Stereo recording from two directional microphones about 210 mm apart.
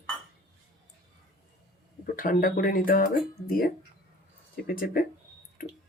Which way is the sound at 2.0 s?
40° left (ahead or behind).